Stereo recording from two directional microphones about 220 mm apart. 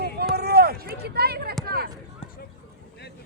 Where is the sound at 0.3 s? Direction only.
45° right (ahead or behind).